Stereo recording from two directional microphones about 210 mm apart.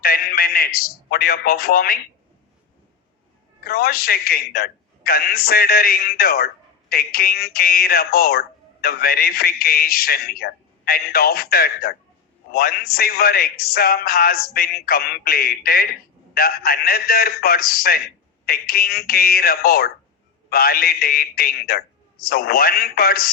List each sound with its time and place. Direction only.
0.0 s a man's voice: 45° left (ahead or behind)
3.6 s a man's voice: 45° left (ahead or behind)